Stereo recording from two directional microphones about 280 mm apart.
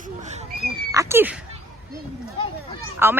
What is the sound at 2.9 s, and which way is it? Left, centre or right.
Speech, centre.